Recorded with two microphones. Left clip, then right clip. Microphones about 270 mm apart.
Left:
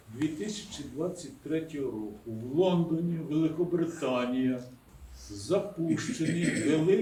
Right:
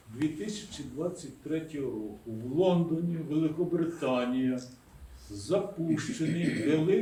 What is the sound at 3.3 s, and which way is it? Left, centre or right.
A man's voice, centre.